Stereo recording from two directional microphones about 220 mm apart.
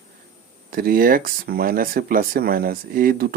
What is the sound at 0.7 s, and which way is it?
Speech, 40° right (ahead or behind).